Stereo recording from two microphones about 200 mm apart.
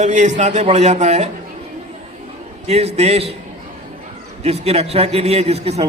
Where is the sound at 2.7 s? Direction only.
30° right (ahead or behind).